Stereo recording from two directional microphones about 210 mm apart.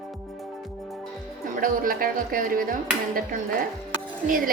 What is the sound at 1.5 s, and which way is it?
Speech, 40° right (ahead or behind).